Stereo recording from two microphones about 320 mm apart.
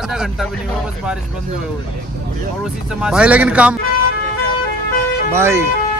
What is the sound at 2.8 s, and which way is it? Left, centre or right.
Speech, centre.